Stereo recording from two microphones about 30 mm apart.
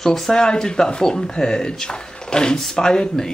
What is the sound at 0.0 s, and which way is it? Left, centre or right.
Speech, centre.